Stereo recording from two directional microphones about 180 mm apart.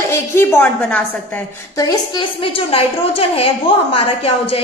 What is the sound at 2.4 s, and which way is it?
A woman's voice, 30° left (ahead or behind).